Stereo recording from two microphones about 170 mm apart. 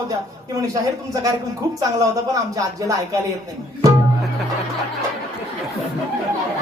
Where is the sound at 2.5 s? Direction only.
20° right (ahead or behind).